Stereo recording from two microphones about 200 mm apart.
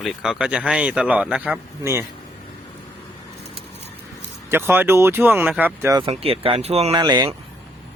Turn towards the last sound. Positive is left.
turn(degrees=-20)  # may be behind; listen again after turning